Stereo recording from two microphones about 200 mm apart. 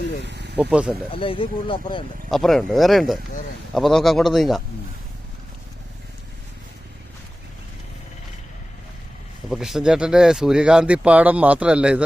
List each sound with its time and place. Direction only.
0.3 s vehicle: 60° right (ahead or behind)
0.6 s speech: 5° right (ahead or behind)
1.1 s speech: 25° left (ahead or behind)
2.3 s speech: centre (ahead or behind)
9.5 s speech: 5° right (ahead or behind)